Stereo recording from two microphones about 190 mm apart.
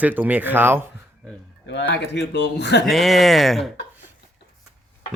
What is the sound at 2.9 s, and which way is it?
Speech, centre (ahead or behind).